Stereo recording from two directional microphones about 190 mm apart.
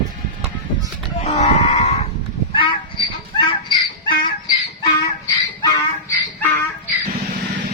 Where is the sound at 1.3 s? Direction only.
35° left (ahead or behind).